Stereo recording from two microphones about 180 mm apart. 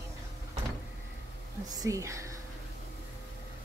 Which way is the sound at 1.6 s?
20° right (ahead or behind).